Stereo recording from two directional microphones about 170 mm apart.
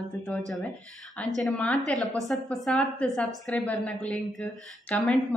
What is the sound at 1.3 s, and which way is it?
A woman's voice, 5° left (ahead or behind).